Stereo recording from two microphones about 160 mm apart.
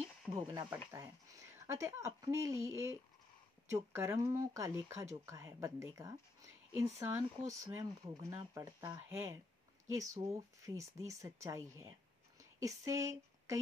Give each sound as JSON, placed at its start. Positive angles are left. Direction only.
{"t": 0.7, "sound": "speech", "side_deg": -15}